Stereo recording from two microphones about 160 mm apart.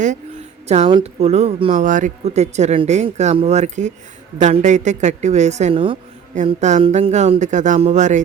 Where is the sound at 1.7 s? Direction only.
50° right (ahead or behind).